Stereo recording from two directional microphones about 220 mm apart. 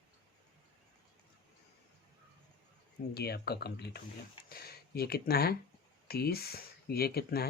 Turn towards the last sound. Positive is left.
turn(degrees=45)  # may be behind; listen again after turning